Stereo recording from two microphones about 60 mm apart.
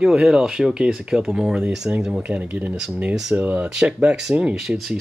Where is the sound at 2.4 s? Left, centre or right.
Right.